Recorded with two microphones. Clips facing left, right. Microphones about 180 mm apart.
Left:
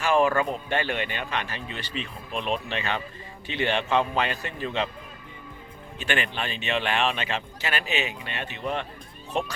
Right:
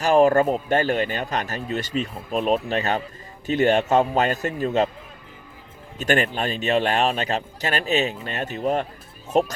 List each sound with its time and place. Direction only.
0.0 s speech: 40° right (ahead or behind)
6.0 s speech: 40° right (ahead or behind)